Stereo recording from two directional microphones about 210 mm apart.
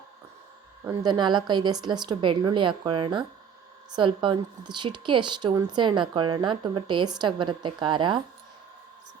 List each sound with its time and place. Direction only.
0.9 s speech: 20° right (ahead or behind)